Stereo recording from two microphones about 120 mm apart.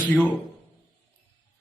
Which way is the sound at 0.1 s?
15° left (ahead or behind).